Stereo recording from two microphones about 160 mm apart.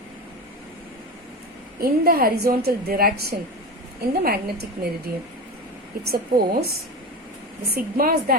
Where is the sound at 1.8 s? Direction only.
65° right (ahead or behind).